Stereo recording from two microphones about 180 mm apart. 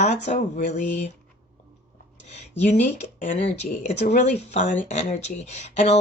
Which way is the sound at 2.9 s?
45° left (ahead or behind).